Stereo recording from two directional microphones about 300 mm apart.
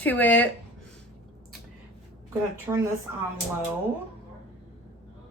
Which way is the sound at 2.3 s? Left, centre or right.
Centre.